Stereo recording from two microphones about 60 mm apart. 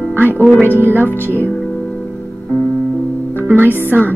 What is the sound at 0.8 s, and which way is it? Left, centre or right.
Speech, right.